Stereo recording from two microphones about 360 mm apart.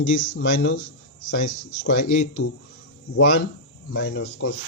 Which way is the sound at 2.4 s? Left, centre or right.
Left.